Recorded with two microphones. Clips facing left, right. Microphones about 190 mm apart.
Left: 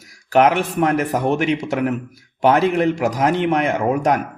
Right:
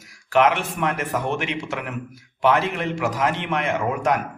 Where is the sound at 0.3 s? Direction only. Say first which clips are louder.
Left 4 dB; 40° left (ahead or behind).